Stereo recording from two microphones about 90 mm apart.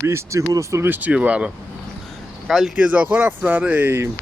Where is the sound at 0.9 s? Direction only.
20° right (ahead or behind).